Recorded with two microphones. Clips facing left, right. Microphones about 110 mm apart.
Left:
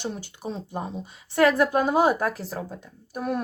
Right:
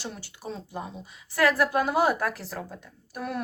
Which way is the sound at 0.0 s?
20° left (ahead or behind).